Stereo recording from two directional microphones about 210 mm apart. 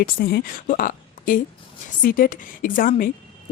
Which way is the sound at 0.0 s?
45° left (ahead or behind).